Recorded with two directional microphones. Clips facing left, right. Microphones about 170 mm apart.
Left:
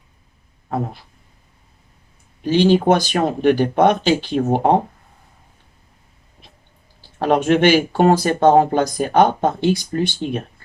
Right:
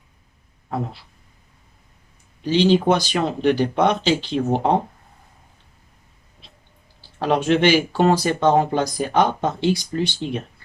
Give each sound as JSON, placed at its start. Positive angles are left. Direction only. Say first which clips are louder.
{"t": 2.4, "sound": "speech", "louder": "left 2 dB", "side_deg": 50}
{"t": 7.2, "sound": "speech", "louder": "left 3 dB", "side_deg": 50}